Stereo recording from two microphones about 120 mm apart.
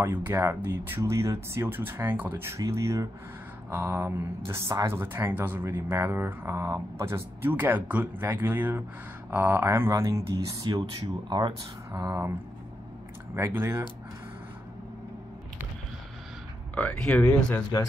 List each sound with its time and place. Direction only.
0.0 s speech: 20° right (ahead or behind); by 11.5 s 40° right (ahead or behind)
11.9 s speech: 25° right (ahead or behind)
13.3 s speech: 20° right (ahead or behind)
16.7 s speech: 10° left (ahead or behind)